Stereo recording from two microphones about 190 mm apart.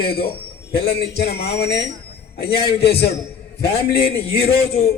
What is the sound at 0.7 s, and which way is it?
A man's voice, 55° left (ahead or behind).